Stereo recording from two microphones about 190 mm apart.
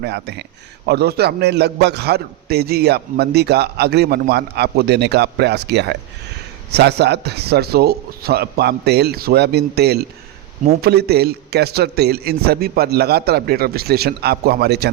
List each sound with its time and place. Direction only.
0.0 s a man's voice: 60° right (ahead or behind)